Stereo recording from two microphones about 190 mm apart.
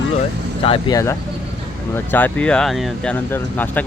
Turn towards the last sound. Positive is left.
turn(degrees=10)  # may be behind; listen again after turning